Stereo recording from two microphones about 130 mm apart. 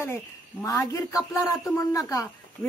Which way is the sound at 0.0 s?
20° left (ahead or behind).